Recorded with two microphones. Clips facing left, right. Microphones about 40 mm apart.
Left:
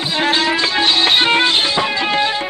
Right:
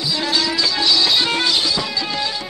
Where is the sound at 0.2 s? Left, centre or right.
Left.